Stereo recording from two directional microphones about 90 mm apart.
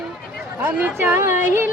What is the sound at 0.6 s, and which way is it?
Music, 20° right (ahead or behind).